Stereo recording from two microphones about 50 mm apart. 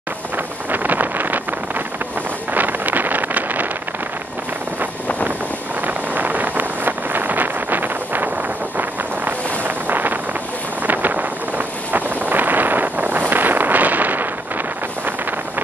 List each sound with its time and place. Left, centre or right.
0.7 s vehicle: right
2.5 s wind noise: right
5.9 s vehicle: right
9.8 s wind noise: right